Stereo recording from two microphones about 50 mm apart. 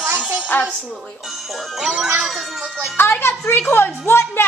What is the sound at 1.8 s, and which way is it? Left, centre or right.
Speech, centre.